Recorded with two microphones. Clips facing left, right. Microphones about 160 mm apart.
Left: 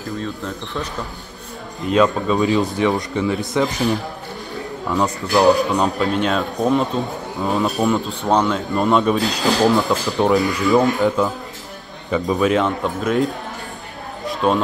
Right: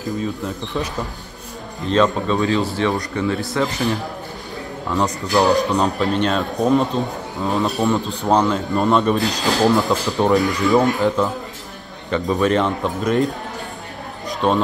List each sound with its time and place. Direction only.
1.9 s a man's voice: 10° left (ahead or behind)
5.3 s speech: centre (ahead or behind)
14.4 s speech: 5° left (ahead or behind)